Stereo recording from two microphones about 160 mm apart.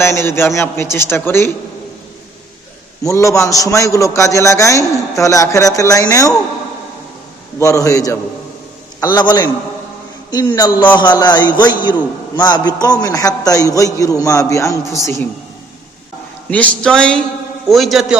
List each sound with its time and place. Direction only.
0.0 s a man's voice: 15° left (ahead or behind)
3.0 s a man's voice: 20° left (ahead or behind)
7.6 s a man's voice: 20° left (ahead or behind)
16.5 s speech: 10° left (ahead or behind)